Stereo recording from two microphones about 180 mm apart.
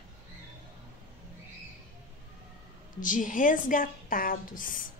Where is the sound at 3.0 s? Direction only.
45° left (ahead or behind).